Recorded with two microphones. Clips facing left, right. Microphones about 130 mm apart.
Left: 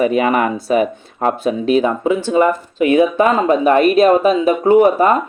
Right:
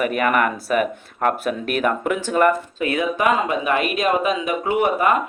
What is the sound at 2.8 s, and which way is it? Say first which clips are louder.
Speech: left 7 dB; 30° left (ahead or behind).